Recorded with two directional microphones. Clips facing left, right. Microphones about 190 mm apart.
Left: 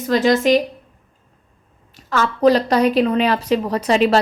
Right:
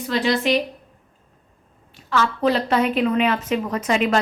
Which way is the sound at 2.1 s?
40° left (ahead or behind).